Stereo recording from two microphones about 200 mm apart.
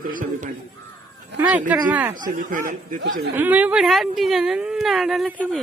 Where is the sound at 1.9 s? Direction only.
10° right (ahead or behind).